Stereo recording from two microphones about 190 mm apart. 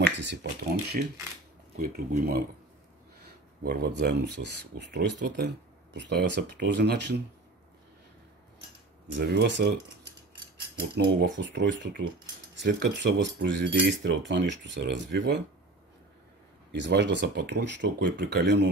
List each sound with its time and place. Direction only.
0.2 s speech: 65° right (ahead or behind)
1.8 s speech: 45° right (ahead or behind)
3.6 s speech: 55° right (ahead or behind)
9.1 s speech: 70° right (ahead or behind)
10.8 s cutlery: 65° right (ahead or behind)
16.7 s speech: 65° right (ahead or behind)